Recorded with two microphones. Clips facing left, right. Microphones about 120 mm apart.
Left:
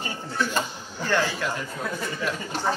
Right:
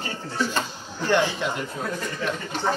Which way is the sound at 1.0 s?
20° right (ahead or behind).